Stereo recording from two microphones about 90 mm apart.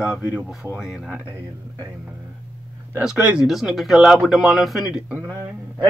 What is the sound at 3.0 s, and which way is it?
Speech, 10° right (ahead or behind).